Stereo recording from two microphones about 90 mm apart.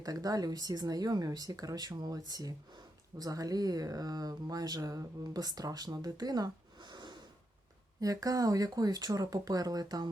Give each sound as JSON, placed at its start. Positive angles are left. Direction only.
{"t": 0.0, "sound": "speech", "side_deg": -45}
{"t": 8.0, "sound": "speech", "side_deg": -40}